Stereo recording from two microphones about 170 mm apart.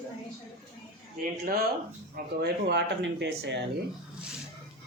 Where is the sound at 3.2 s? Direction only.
90° right.